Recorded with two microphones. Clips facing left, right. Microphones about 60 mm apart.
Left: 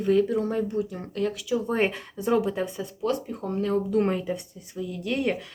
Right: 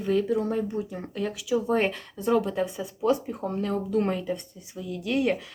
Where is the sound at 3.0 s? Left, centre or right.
Centre.